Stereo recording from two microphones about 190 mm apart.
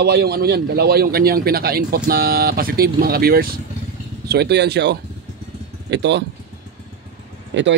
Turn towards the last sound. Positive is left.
turn(degrees=-70)  # may be behind; listen again after turning